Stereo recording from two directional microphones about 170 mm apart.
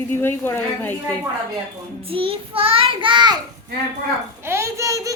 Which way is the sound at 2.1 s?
30° right (ahead or behind).